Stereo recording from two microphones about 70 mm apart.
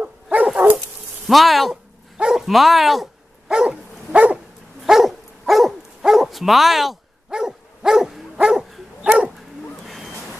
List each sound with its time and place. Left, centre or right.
0.0 s dog: right
1.2 s speech: centre
2.1 s dog: centre
4.8 s dog: centre